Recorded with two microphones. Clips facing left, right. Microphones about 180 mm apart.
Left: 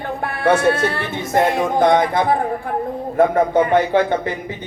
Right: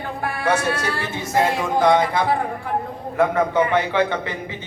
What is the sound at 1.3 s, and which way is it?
A man's voice, 55° left (ahead or behind).